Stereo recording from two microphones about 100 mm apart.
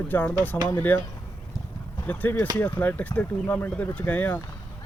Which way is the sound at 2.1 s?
20° left (ahead or behind).